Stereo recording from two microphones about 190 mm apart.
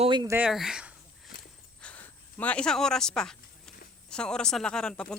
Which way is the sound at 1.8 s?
5° left (ahead or behind).